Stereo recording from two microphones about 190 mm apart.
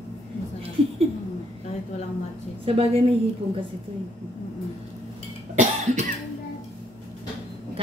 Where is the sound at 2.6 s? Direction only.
30° right (ahead or behind).